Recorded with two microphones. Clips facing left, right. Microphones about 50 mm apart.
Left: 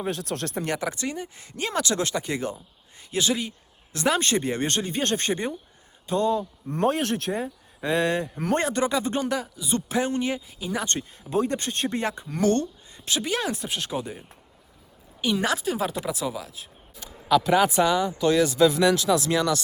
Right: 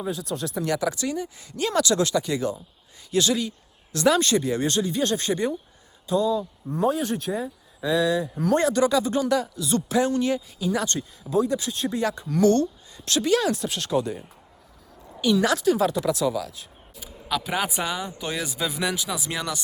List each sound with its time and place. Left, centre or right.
0.0 s speech: left
0.6 s speech: left
6.1 s speech: left
7.4 s speech: left
9.3 s speech: centre
10.8 s speech: left
12.3 s speech: left
13.1 s speech: centre
15.2 s speech: left
17.0 s speech: centre